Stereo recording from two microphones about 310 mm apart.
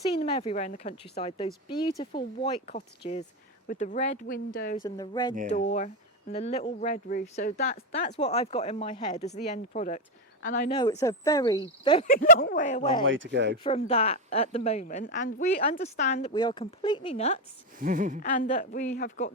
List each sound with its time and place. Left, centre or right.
0.2 s a woman's voice: centre
4.8 s speech: centre
5.5 s a woman's voice: left
10.8 s a woman's voice: centre
13.1 s speech: right
13.7 s a woman's voice: centre
17.7 s a woman's voice: right
18.2 s a woman's voice: left